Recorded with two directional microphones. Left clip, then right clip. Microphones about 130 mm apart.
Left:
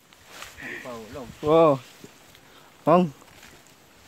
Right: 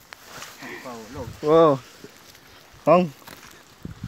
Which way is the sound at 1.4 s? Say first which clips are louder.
Right 2 dB; 5° left (ahead or behind).